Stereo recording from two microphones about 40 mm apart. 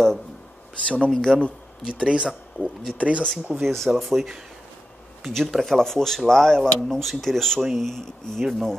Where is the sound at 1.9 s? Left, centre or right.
Right.